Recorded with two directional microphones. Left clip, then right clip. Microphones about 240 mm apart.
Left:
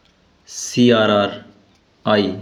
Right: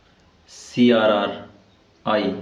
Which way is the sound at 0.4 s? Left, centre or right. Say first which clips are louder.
Left 3 dB; left.